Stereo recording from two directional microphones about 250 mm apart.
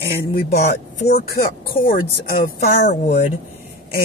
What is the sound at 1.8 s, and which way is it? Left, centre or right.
Speech, left.